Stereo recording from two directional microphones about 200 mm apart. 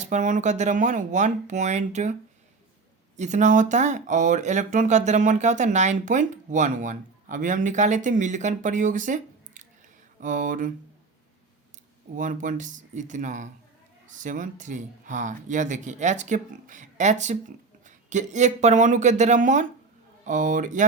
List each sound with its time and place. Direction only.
0.0 s speech: 40° right (ahead or behind)
3.2 s speech: 35° right (ahead or behind)
12.1 s speech: 40° right (ahead or behind)